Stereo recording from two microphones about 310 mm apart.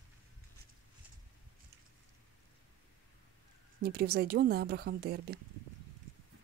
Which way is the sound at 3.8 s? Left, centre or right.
Right.